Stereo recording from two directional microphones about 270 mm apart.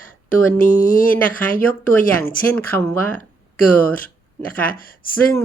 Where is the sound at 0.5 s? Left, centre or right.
Left.